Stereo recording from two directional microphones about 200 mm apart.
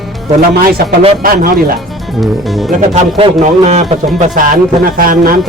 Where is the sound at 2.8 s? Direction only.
30° right (ahead or behind).